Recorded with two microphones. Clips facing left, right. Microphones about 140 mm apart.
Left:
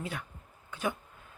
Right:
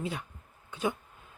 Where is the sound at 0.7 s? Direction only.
20° right (ahead or behind).